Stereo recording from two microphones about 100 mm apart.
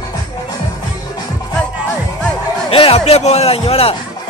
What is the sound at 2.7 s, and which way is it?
A man's voice, 70° left (ahead or behind).